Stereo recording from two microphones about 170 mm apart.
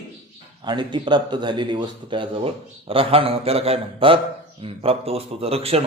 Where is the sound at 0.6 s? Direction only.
25° right (ahead or behind).